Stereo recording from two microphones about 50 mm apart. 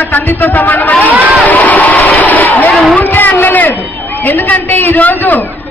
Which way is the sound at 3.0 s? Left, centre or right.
Left.